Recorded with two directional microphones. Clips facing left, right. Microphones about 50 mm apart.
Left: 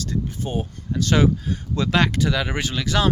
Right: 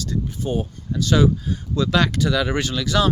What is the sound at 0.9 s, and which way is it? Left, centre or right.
Speech, left.